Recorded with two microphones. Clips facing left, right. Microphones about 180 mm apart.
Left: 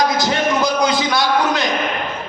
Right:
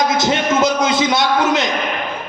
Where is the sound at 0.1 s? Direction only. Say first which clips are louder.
Right 1 dB; 20° right (ahead or behind).